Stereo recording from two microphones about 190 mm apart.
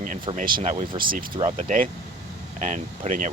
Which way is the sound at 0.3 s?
45° right (ahead or behind).